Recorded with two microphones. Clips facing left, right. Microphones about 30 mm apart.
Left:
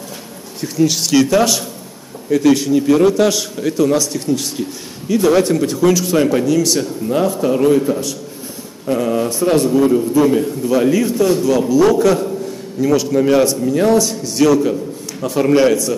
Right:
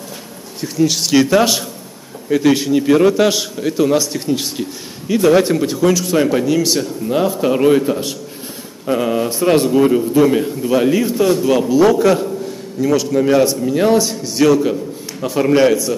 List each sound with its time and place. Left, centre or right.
0.6 s a man's voice: centre
1.1 s a man's voice: centre
6.4 s speech: centre
7.4 s a man's voice: right
12.8 s a man's voice: centre